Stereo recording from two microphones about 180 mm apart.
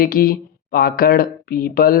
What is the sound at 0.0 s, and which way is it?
Speech, 55° left (ahead or behind).